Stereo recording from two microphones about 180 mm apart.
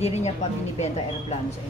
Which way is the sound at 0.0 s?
35° left (ahead or behind).